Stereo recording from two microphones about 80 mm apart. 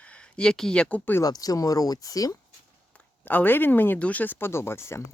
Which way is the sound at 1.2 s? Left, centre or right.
Left.